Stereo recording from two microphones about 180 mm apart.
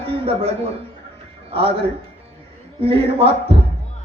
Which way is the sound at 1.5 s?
30° right (ahead or behind).